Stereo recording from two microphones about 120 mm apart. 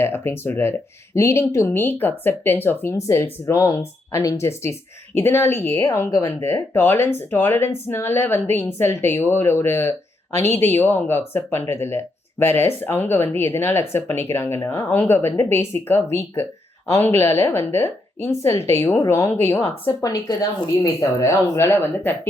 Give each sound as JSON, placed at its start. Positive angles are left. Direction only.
{"t": 0.0, "sound": "speech", "side_deg": 20}